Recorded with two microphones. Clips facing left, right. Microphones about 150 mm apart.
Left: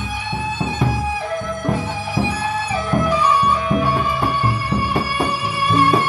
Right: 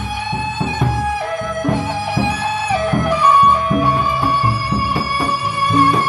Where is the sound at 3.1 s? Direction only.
55° right (ahead or behind).